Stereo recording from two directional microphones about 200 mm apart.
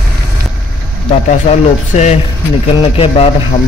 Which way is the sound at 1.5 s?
35° left (ahead or behind).